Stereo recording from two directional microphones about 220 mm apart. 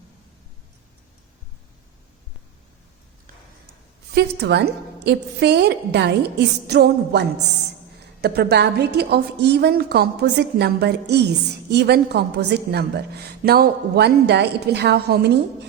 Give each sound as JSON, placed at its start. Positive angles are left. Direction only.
{"t": 4.1, "sound": "a woman's voice", "side_deg": -50}